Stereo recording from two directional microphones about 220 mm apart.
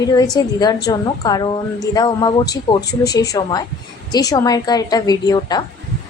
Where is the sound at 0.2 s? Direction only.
20° left (ahead or behind).